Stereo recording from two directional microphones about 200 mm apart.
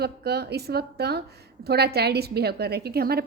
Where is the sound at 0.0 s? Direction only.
55° right (ahead or behind).